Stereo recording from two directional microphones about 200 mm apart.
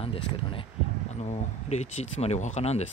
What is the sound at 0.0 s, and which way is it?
Speech, 25° left (ahead or behind).